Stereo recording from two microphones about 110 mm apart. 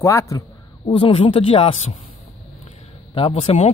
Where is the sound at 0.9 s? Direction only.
50° left (ahead or behind); by 2.0 s 75° left (ahead or behind).